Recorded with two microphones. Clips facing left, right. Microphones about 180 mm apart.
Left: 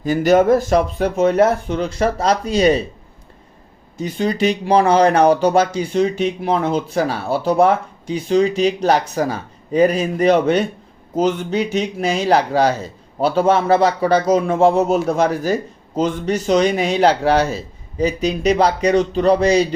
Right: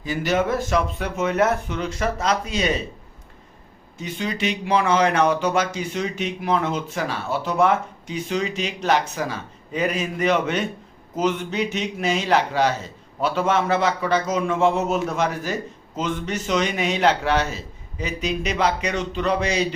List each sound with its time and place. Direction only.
0.0 s speech: 40° left (ahead or behind)
3.9 s speech: 35° left (ahead or behind)